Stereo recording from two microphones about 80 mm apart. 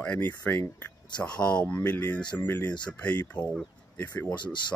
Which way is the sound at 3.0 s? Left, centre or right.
Centre.